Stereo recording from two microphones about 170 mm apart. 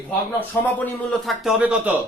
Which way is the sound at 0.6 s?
5° left (ahead or behind).